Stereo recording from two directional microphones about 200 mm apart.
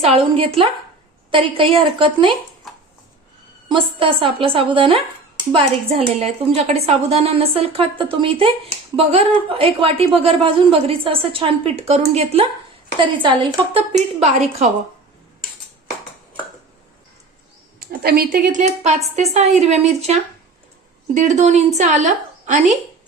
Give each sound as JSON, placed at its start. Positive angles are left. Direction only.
{"t": 0.0, "sound": "a woman's voice", "side_deg": -30}
{"t": 3.7, "sound": "a woman's voice", "side_deg": -25}
{"t": 13.9, "sound": "speech", "side_deg": -35}
{"t": 17.7, "sound": "a woman's voice", "side_deg": -50}